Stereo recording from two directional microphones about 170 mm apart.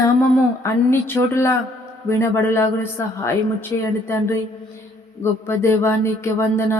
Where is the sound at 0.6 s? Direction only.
15° left (ahead or behind).